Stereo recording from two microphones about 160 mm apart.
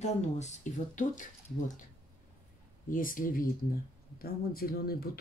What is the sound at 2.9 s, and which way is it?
Speech, 60° left (ahead or behind).